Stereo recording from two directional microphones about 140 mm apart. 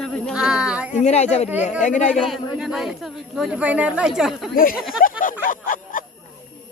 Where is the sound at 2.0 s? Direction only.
Centre (ahead or behind).